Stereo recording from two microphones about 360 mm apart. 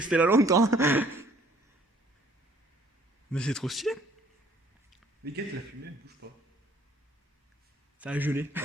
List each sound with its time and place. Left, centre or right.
0.0 s speech: centre
3.3 s a man's voice: centre
6.2 s speech: right
7.9 s a man's voice: centre